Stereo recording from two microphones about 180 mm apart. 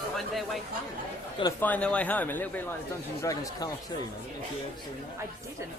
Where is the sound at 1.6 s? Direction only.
10° left (ahead or behind).